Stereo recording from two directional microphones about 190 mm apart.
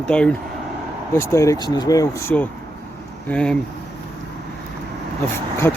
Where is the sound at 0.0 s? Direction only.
5° left (ahead or behind).